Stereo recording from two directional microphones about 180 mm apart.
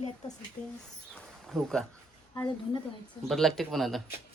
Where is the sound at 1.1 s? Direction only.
Centre (ahead or behind).